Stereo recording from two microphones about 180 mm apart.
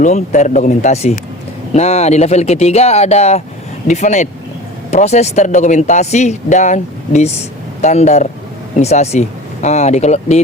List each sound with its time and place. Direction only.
0.0 s speech: 40° left (ahead or behind)